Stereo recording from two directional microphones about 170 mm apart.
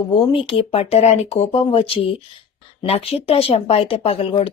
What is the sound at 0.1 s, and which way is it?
Speech, 30° left (ahead or behind).